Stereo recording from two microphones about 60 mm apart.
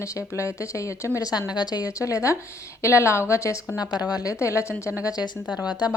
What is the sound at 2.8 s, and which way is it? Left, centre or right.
A woman's voice, left.